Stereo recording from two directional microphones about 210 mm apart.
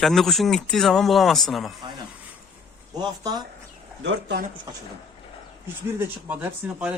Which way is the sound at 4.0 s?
60° right (ahead or behind).